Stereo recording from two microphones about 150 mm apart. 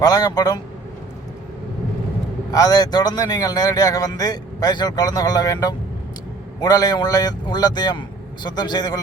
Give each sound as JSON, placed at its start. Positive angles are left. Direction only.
{"t": 0.0, "sound": "a man's voice", "side_deg": 25}
{"t": 2.5, "sound": "a man's voice", "side_deg": 25}